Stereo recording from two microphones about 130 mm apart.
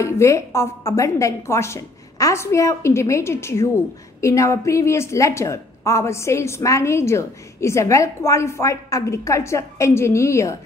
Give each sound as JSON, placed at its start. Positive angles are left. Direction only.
{"t": 0.0, "sound": "a woman's voice", "side_deg": 20}